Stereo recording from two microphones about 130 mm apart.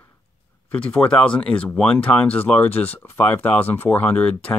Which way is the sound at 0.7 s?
10° left (ahead or behind).